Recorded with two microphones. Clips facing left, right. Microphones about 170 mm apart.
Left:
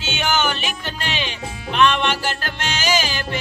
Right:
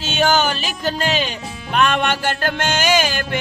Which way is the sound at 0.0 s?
35° right (ahead or behind).